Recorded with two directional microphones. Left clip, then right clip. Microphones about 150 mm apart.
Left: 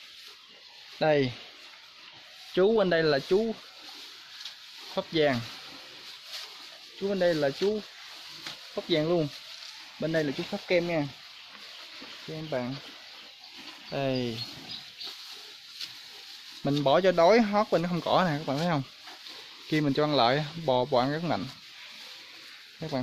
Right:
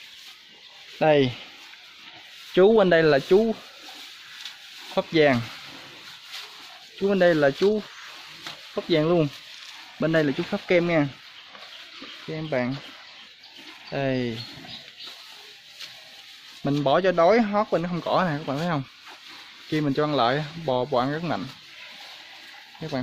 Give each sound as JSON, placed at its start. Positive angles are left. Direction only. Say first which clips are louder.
{"t": 0.9, "sound": "stir", "louder": "right 5 dB", "side_deg": -5}
{"t": 2.5, "sound": "speech", "louder": "right 7 dB", "side_deg": -20}
{"t": 4.9, "sound": "speech", "louder": "right 6 dB", "side_deg": -20}
{"t": 7.1, "sound": "speech", "louder": "right 7 dB", "side_deg": -30}
{"t": 8.7, "sound": "stir", "louder": "right 5 dB", "side_deg": -15}
{"t": 9.9, "sound": "speech", "louder": "right 6 dB", "side_deg": -20}
{"t": 12.4, "sound": "speech", "louder": "right 6 dB", "side_deg": -20}
{"t": 13.8, "sound": "speech", "louder": "right 4 dB", "side_deg": 5}
{"t": 16.6, "sound": "speech", "louder": "right 2 dB", "side_deg": 15}